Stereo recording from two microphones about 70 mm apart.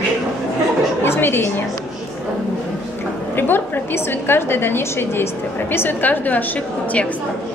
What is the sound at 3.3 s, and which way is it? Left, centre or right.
A woman's voice, left.